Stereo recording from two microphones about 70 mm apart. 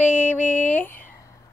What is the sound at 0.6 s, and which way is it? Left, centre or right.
Speech, left.